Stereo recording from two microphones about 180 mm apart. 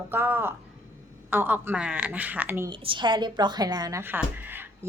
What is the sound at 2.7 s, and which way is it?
A woman's voice, 25° right (ahead or behind).